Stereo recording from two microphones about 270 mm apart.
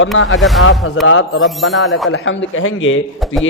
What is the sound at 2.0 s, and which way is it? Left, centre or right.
Speech, left.